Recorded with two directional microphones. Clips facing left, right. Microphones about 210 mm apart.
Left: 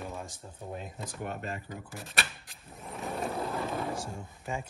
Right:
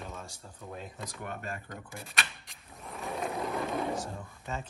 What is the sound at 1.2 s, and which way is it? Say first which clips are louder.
Speech: left 3 dB; 50° right (ahead or behind).